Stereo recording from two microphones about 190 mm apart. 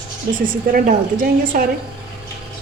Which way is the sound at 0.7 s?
45° right (ahead or behind).